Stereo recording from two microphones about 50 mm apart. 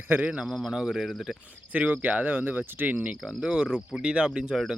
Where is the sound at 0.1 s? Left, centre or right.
Right.